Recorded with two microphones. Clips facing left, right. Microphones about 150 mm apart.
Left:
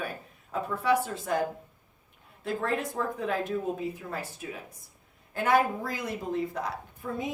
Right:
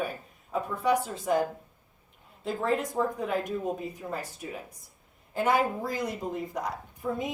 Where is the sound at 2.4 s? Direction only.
20° right (ahead or behind).